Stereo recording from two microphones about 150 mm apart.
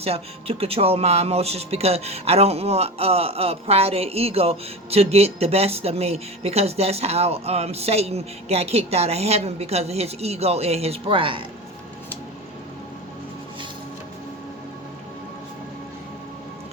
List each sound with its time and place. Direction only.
0.0 s speech: 40° right (ahead or behind)